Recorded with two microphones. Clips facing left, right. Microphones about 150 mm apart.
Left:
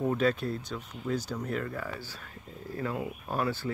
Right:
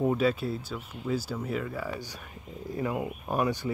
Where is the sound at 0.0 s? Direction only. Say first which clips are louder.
Right 2 dB; 10° right (ahead or behind).